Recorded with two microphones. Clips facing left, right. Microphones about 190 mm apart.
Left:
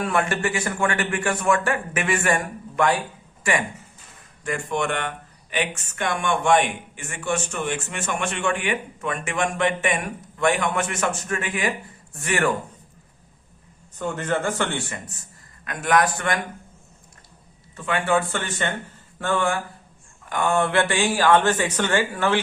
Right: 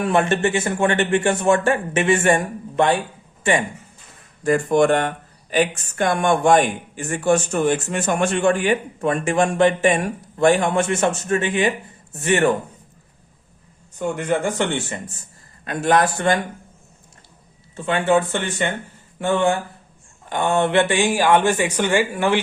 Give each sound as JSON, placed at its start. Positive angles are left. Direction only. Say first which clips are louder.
{"t": 0.0, "sound": "a man's voice", "louder": "right 5 dB", "side_deg": -25}
{"t": 4.4, "sound": "a man's voice", "louder": "right 10 dB", "side_deg": -40}
{"t": 14.0, "sound": "a man's voice", "louder": "right 3 dB", "side_deg": -15}
{"t": 17.7, "sound": "a man's voice", "louder": "right 4 dB", "side_deg": -25}